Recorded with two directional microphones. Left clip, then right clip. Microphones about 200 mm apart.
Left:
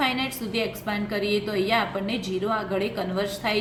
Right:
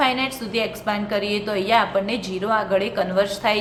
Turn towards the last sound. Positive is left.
turn(degrees=-10)  # may be behind; listen again after turning